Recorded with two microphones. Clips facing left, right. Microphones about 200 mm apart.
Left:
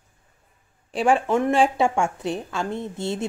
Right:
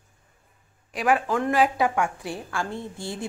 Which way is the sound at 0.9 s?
30° left (ahead or behind).